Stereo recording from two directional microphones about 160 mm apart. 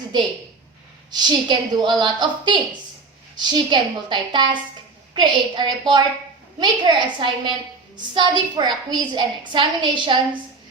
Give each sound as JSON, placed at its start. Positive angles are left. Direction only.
{"t": 1.1, "sound": "a woman's voice", "side_deg": -30}